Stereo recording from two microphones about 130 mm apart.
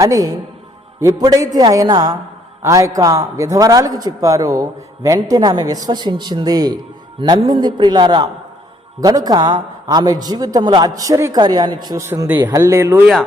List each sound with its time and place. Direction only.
0.0 s a man's voice: 25° right (ahead or behind)
11.9 s a man's voice: 25° right (ahead or behind)